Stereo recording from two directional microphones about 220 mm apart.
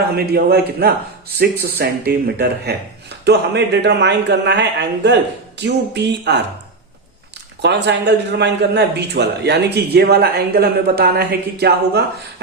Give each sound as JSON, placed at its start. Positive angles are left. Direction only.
{"t": 0.2, "sound": "speech", "side_deg": -45}
{"t": 7.6, "sound": "speech", "side_deg": -50}